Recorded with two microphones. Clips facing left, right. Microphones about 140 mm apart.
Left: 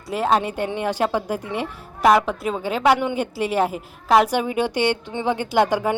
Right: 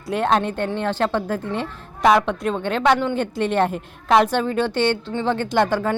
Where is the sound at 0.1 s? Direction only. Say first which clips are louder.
Right 1 dB; 5° left (ahead or behind).